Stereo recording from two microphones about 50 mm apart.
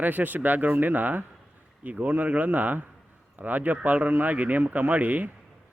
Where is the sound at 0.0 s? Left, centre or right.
Right.